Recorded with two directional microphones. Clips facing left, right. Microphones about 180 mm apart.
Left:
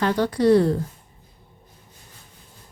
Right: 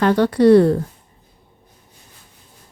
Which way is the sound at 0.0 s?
65° right (ahead or behind).